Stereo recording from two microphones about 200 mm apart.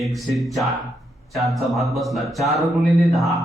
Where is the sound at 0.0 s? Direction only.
Centre (ahead or behind).